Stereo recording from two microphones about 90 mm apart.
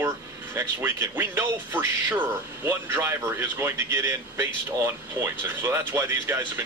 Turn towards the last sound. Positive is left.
turn(degrees=-25)  # may be behind; listen again after turning